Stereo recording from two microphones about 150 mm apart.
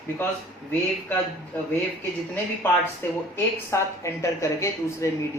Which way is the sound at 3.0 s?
15° left (ahead or behind).